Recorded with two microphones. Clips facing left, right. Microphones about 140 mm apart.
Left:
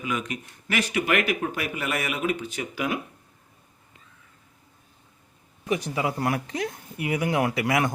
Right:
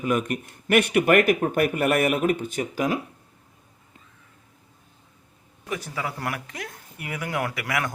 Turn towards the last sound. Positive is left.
turn(degrees=25)  # may be behind; listen again after turning